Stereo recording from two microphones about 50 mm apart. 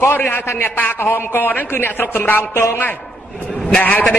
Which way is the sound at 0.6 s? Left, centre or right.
Left.